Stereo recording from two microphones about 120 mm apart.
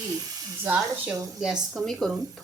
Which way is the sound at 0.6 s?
15° right (ahead or behind).